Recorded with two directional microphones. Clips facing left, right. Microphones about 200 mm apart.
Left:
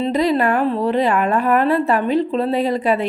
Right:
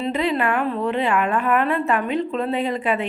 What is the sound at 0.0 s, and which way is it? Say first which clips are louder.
A woman's voice: left 5 dB; 35° left (ahead or behind).